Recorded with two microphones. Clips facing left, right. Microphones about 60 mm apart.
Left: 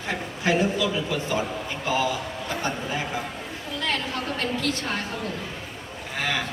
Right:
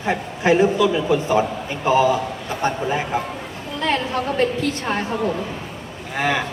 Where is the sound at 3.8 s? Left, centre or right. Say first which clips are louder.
Right 7 dB; right.